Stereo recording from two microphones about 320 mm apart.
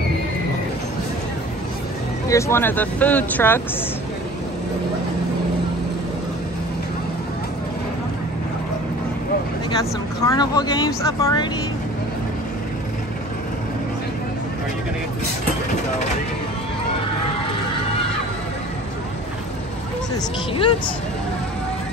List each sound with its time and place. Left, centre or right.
2.2 s speech: centre
10.2 s speech: centre
20.5 s speech: centre